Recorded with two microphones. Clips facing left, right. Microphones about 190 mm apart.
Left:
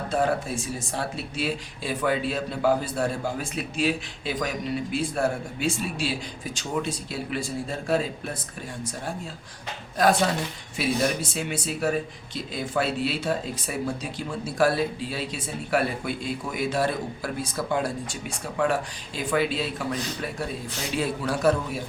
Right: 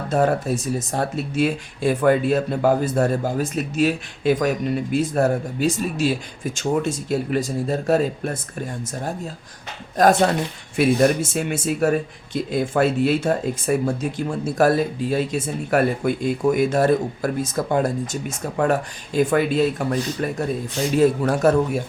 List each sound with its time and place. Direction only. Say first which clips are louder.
0.1 s speech: right 6 dB; 45° right (ahead or behind)
10.0 s speech: right 5 dB; 45° right (ahead or behind)